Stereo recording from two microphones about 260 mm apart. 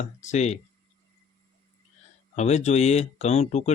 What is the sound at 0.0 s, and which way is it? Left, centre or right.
Speech, left.